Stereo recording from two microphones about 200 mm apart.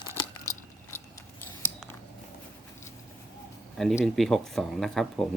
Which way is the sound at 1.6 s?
10° left (ahead or behind).